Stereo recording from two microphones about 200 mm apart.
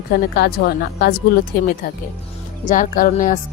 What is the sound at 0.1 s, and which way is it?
A woman's voice, 50° left (ahead or behind).